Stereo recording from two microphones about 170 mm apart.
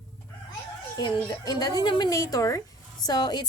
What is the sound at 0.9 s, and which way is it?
A woman's voice, 25° left (ahead or behind).